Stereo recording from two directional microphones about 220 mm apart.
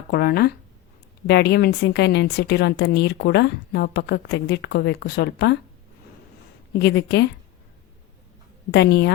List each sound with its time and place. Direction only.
0.1 s a woman's voice: 45° left (ahead or behind)
6.7 s a woman's voice: 50° left (ahead or behind)
8.7 s a woman's voice: 50° left (ahead or behind)